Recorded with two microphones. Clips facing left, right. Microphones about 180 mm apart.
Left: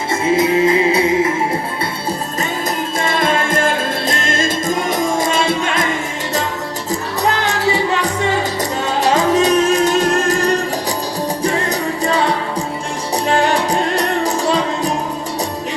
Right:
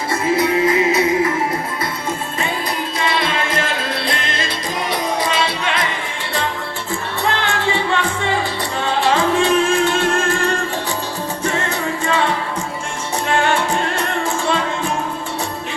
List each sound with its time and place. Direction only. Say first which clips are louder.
0.1 s music: left 3 dB; 25° left (ahead or behind)
3.0 s music: left 3 dB; 45° left (ahead or behind)
7.2 s music: left 2 dB; 40° left (ahead or behind)